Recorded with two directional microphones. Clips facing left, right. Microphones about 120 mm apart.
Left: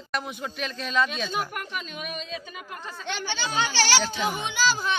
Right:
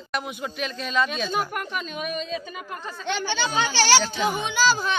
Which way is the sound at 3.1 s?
70° right (ahead or behind).